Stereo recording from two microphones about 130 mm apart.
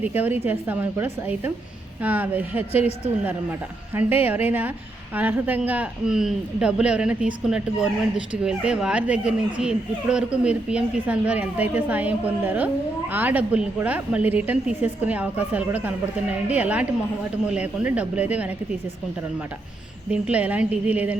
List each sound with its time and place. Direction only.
0.0 s speech: 15° right (ahead or behind)
2.7 s a woman's voice: 50° left (ahead or behind)
3.9 s speech: 15° right (ahead or behind)
20.1 s speech: 10° right (ahead or behind)